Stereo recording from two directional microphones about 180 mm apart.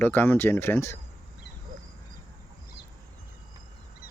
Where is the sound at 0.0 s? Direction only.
10° left (ahead or behind).